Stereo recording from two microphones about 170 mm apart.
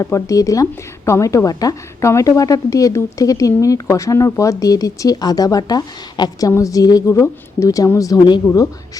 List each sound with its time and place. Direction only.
0.0 s a woman's voice: 20° left (ahead or behind)